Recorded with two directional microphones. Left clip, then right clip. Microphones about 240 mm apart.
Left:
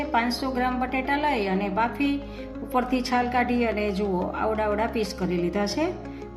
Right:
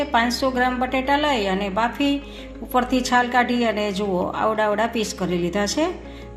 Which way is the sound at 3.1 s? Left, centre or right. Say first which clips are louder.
Right 5 dB; right.